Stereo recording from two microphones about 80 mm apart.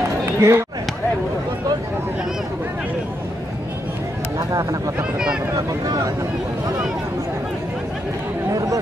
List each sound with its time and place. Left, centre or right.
0.2 s a sound: right
4.6 s speech: right
4.9 s speech: centre
8.5 s speech: right